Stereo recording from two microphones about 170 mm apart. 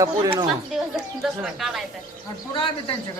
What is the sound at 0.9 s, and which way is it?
Speech, centre (ahead or behind).